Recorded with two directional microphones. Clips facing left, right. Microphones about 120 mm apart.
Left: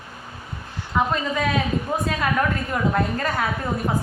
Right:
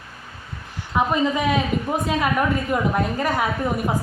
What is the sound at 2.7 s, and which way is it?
Speech, 15° right (ahead or behind).